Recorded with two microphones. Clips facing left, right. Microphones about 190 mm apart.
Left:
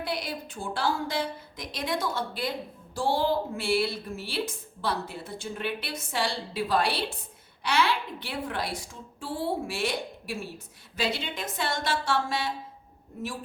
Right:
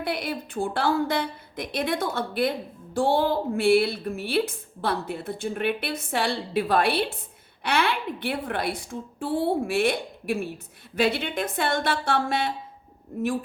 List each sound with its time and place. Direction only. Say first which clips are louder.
0.0 s a woman's voice: right 4 dB; 55° right (ahead or behind)